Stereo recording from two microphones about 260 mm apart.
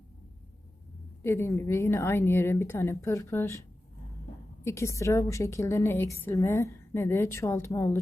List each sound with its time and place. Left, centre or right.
1.2 s a woman's voice: centre